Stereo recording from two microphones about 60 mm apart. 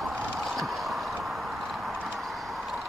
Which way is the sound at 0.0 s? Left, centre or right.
Centre.